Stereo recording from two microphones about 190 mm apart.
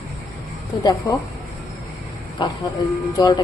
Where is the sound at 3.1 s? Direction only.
20° left (ahead or behind).